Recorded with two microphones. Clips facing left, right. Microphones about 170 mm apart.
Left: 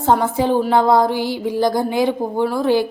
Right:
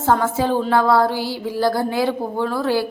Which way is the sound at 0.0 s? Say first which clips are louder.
Left 2 dB; 20° left (ahead or behind).